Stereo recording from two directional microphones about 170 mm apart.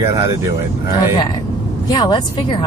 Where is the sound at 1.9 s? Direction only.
25° left (ahead or behind).